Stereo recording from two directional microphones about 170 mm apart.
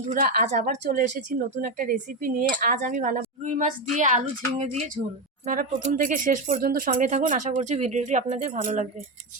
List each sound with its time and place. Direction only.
0.1 s a woman's voice: 55° right (ahead or behind)
5.0 s a woman's voice: 25° right (ahead or behind)
5.5 s speech: 50° right (ahead or behind)